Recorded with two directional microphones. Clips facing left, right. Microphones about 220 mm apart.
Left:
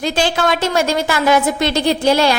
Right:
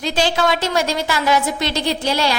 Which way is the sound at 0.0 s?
50° left (ahead or behind).